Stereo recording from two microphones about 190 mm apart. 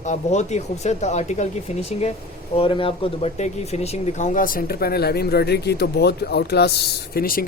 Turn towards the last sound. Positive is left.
turn(degrees=50)  # may be behind; listen again after turning